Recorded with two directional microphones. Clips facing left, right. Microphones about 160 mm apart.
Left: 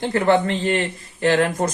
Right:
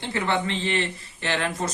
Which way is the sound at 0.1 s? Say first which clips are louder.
Left 7 dB; 45° left (ahead or behind).